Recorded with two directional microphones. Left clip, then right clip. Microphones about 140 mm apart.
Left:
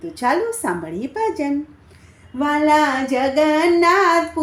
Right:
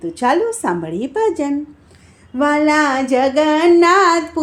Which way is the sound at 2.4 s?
35° right (ahead or behind).